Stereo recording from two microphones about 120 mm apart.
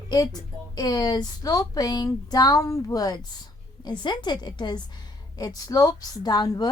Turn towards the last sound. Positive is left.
turn(degrees=35)  # may be behind; listen again after turning